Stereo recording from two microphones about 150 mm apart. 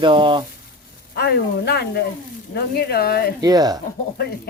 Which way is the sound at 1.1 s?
90° left.